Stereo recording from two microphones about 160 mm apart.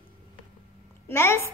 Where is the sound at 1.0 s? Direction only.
15° left (ahead or behind).